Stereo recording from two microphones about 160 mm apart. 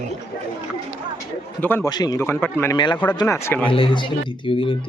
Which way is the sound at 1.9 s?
25° left (ahead or behind).